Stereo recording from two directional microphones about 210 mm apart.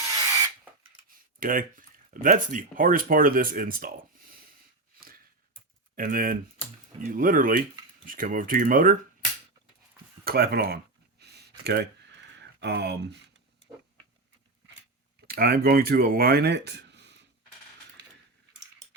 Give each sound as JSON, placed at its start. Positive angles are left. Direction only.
{"t": 1.4, "sound": "speech", "side_deg": -40}
{"t": 6.0, "sound": "speech", "side_deg": -45}
{"t": 10.2, "sound": "speech", "side_deg": -45}
{"t": 11.2, "sound": "a sound", "side_deg": -50}
{"t": 12.4, "sound": "speech", "side_deg": -55}
{"t": 15.3, "sound": "speech", "side_deg": -45}